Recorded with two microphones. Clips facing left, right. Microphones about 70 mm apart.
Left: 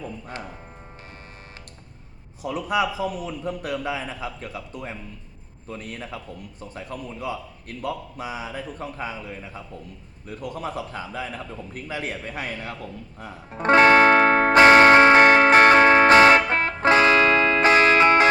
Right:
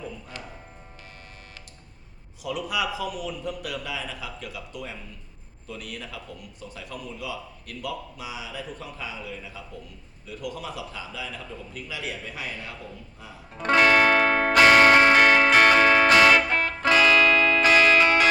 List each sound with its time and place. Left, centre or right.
2.4 s a man's voice: left
13.5 s music: left